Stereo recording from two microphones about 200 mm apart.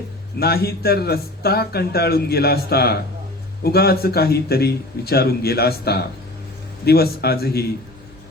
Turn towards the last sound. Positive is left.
turn(degrees=50)  # may be behind; listen again after turning